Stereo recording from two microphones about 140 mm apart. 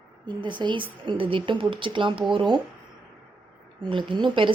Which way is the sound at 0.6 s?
35° right (ahead or behind).